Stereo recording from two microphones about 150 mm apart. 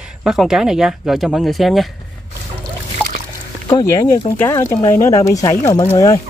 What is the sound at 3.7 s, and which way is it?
Speech, 25° left (ahead or behind).